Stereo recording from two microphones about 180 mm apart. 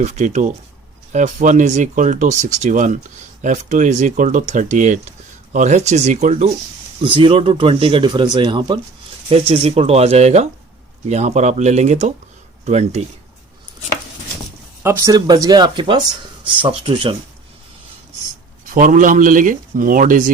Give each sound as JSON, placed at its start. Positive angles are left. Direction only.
{"t": 0.0, "sound": "speech", "side_deg": -40}
{"t": 7.0, "sound": "speech", "side_deg": -30}
{"t": 14.8, "sound": "speech", "side_deg": -20}
{"t": 18.6, "sound": "speech", "side_deg": -45}